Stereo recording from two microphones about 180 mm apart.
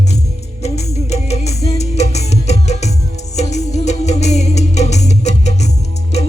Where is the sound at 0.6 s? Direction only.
35° left (ahead or behind).